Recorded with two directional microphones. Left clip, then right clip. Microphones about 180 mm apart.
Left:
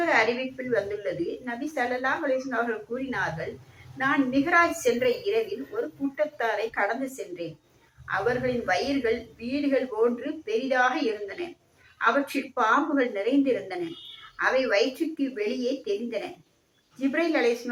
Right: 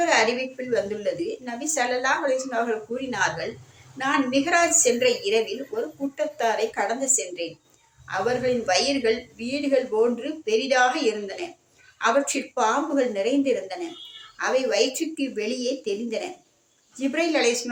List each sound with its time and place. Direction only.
0.0 s a woman's voice: 40° right (ahead or behind)
11.9 s a woman's voice: 40° right (ahead or behind)